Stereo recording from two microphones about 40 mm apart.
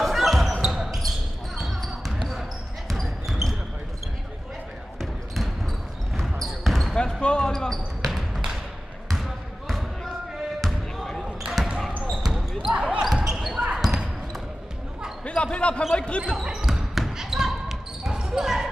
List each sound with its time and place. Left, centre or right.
0.0 s basketball bounce: centre
6.1 s a sound: centre
7.0 s basketball bounce: left
8.0 s basketball bounce: centre
12.3 s a sound: centre
12.7 s a sound: right
13.0 s basketball bounce: centre
15.2 s basketball bounce: left
16.3 s basketball bounce: centre